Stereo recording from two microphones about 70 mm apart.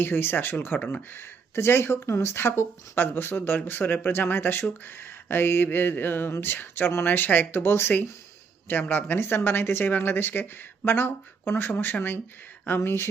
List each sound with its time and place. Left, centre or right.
0.0 s speech: left